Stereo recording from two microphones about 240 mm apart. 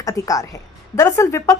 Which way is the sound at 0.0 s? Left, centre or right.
Centre.